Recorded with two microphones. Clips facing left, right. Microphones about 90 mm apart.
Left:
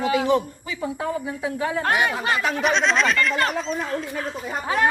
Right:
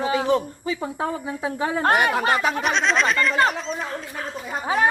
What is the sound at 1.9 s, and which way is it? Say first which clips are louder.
Speech: right 4 dB; 55° right (ahead or behind).